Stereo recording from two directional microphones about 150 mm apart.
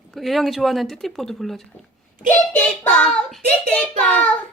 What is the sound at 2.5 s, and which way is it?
Child singing, 10° left (ahead or behind).